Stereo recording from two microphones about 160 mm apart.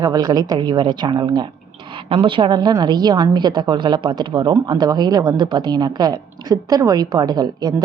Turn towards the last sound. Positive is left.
turn(degrees=-25)  # may be behind; listen again after turning